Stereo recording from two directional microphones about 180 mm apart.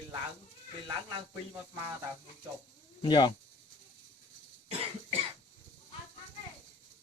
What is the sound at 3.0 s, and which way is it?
Speech, 25° left (ahead or behind).